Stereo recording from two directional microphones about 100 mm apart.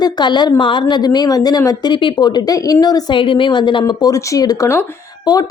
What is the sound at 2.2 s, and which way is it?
Speech, 40° left (ahead or behind).